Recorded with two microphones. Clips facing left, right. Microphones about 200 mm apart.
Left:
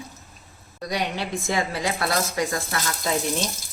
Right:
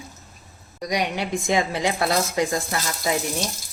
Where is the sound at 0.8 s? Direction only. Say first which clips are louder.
Right 2 dB; 15° right (ahead or behind).